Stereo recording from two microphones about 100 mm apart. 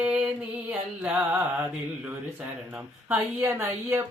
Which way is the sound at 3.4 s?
25° right (ahead or behind).